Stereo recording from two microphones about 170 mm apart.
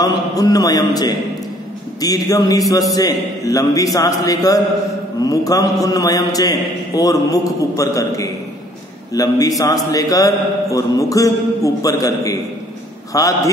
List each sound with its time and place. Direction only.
0.0 s a man's voice: 20° left (ahead or behind)